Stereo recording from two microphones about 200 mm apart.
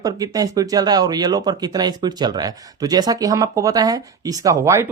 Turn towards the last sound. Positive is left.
turn(degrees=-15)  # may be behind; listen again after turning